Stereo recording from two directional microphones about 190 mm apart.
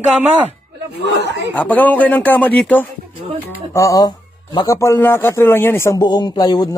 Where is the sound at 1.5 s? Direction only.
10° left (ahead or behind).